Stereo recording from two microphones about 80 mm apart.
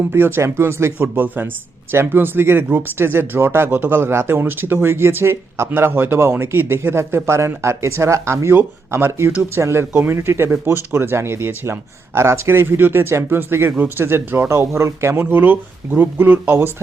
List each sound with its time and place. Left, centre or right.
0.1 s speech: right